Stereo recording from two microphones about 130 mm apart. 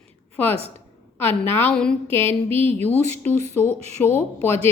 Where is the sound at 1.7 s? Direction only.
5° left (ahead or behind).